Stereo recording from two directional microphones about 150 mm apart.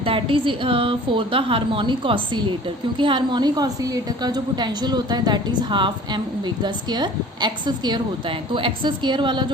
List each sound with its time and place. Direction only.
0.0 s a woman's voice: 35° right (ahead or behind)